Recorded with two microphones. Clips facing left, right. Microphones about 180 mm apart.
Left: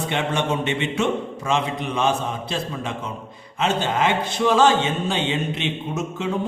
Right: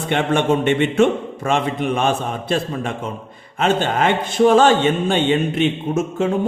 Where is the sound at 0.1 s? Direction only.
55° right (ahead or behind).